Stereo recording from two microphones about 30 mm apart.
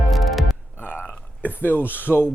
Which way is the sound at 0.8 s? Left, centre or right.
Left.